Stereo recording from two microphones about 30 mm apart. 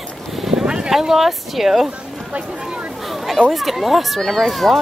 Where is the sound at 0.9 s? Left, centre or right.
Centre.